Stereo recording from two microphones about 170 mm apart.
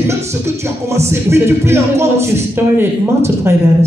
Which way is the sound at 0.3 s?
15° right (ahead or behind).